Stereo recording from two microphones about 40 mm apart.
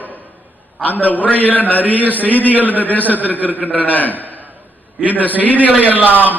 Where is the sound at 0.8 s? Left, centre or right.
Left.